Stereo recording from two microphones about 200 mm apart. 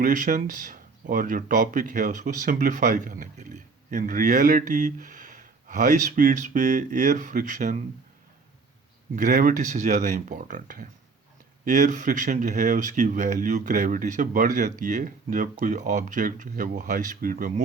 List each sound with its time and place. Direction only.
0.0 s speech: 40° right (ahead or behind)
9.1 s speech: 40° right (ahead or behind)